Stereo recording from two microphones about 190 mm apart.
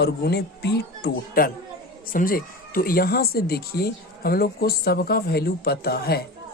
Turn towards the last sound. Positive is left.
turn(degrees=55)  # may be behind; listen again after turning